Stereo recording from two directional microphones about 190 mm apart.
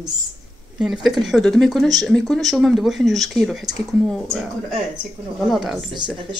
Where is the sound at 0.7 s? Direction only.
5° right (ahead or behind).